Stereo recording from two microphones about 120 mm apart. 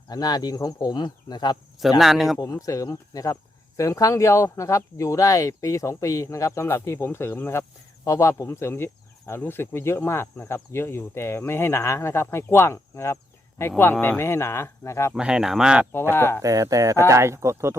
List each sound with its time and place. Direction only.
0.1 s speech: 35° left (ahead or behind)
2.0 s speech: centre (ahead or behind)
2.4 s speech: 30° left (ahead or behind)
15.1 s speech: 5° right (ahead or behind)
15.9 s speech: 20° left (ahead or behind)
16.4 s speech: 25° right (ahead or behind)